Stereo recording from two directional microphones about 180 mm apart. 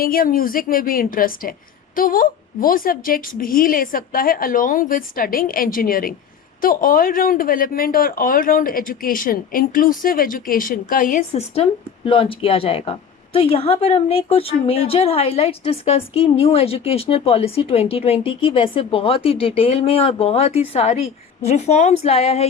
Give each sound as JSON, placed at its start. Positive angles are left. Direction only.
{"t": 0.0, "sound": "a woman's voice", "side_deg": 55}